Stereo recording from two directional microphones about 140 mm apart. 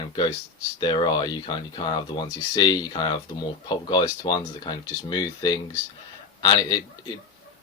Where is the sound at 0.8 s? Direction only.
35° left (ahead or behind).